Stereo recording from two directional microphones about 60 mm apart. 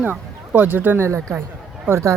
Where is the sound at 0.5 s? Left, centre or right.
Right.